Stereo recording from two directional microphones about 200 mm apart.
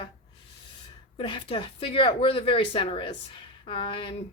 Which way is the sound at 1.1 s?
25° left (ahead or behind).